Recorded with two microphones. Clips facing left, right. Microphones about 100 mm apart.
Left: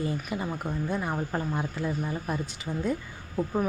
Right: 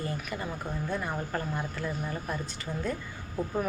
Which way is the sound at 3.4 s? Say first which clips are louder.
Left 3 dB; centre (ahead or behind).